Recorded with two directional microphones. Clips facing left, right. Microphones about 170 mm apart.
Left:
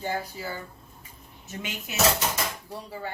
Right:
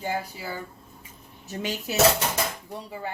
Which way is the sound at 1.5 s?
35° right (ahead or behind).